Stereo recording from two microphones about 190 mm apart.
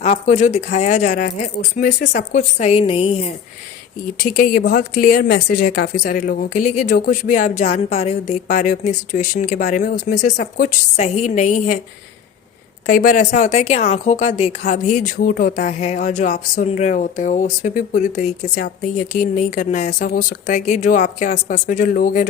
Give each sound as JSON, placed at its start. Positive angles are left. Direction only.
{"t": 0.0, "sound": "speech", "side_deg": 35}
{"t": 4.2, "sound": "speech", "side_deg": 45}
{"t": 12.8, "sound": "speech", "side_deg": 50}